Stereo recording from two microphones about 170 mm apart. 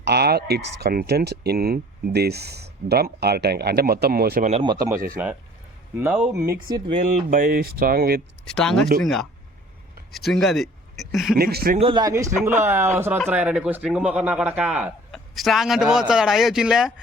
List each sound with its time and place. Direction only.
0.0 s speech: 70° right (ahead or behind)
4.6 s speech: 25° right (ahead or behind)
5.1 s a man's voice: 10° right (ahead or behind)
6.7 s speech: 25° right (ahead or behind)
7.3 s speech: 55° right (ahead or behind)
8.4 s speech: 5° left (ahead or behind)
10.1 s speech: centre (ahead or behind)
11.3 s speech: 65° right (ahead or behind)
11.8 s a man's voice: 30° right (ahead or behind); by 16.9 s 5° right (ahead or behind)